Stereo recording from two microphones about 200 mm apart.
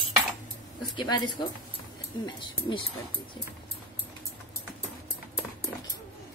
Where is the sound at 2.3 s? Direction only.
25° left (ahead or behind).